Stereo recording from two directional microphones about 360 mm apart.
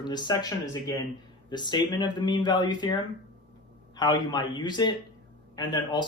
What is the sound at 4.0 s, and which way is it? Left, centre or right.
A man's voice, centre.